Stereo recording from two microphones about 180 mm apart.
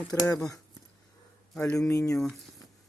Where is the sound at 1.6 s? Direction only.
15° left (ahead or behind).